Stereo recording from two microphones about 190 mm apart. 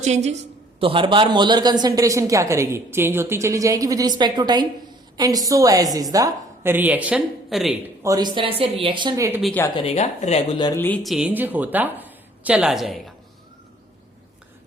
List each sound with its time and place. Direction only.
0.0 s a woman's voice: 35° right (ahead or behind); by 7.8 s centre (ahead or behind)
8.0 s speech: 20° right (ahead or behind)
9.4 s speech: 5° left (ahead or behind)
9.7 s speech: 35° left (ahead or behind)
10.8 s a woman's voice: 10° left (ahead or behind)